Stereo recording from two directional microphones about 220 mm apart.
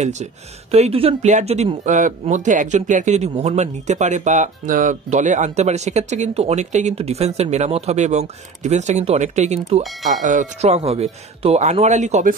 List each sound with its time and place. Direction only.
0.0 s speech: 30° right (ahead or behind)